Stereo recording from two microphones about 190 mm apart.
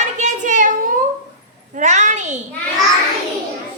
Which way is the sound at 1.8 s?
40° right (ahead or behind).